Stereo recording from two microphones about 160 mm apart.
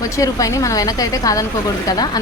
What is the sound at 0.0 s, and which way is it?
Speech, 20° left (ahead or behind).